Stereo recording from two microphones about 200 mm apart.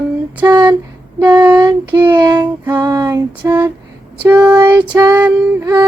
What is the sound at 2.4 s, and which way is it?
Child singing, 10° right (ahead or behind).